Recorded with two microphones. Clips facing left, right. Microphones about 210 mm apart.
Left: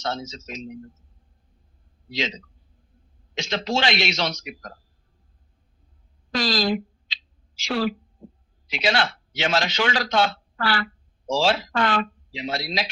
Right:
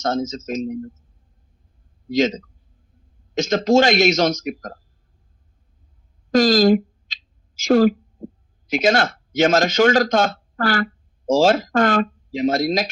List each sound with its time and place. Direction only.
0.0 s a man's voice: 45° right (ahead or behind)
2.0 s a man's voice: 45° right (ahead or behind)
6.3 s speech: 45° right (ahead or behind)
8.2 s a sound: 45° right (ahead or behind)
8.6 s a man's voice: 45° right (ahead or behind)